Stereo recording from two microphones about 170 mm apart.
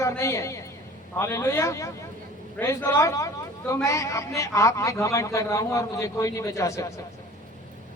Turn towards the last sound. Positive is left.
turn(degrees=20)  # may be behind; listen again after turning